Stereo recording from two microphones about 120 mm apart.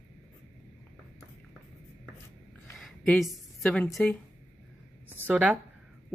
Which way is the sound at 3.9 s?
5° left (ahead or behind).